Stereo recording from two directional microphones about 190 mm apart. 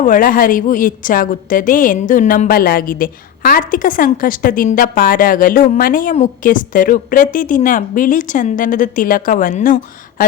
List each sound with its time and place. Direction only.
0.0 s a woman's voice: 45° left (ahead or behind)